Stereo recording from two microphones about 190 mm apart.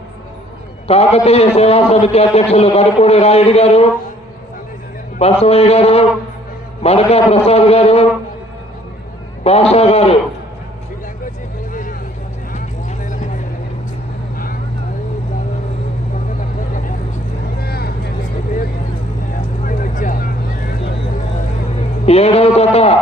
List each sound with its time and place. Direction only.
0.9 s a man's voice: 35° left (ahead or behind)
5.2 s a man's voice: 30° left (ahead or behind)
9.4 s a man's voice: 30° left (ahead or behind)
11.7 s vehicle: 45° left (ahead or behind)
17.6 s vehicle: 55° left (ahead or behind)
19.6 s vehicle: 45° left (ahead or behind)
22.0 s a sound: 35° left (ahead or behind)